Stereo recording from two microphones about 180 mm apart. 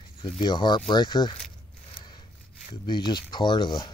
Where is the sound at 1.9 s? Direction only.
25° left (ahead or behind).